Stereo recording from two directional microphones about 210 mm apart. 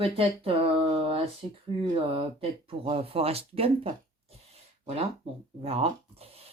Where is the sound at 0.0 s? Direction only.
25° right (ahead or behind).